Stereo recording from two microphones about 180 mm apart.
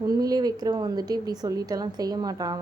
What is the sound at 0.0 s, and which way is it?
A woman's voice, 20° right (ahead or behind).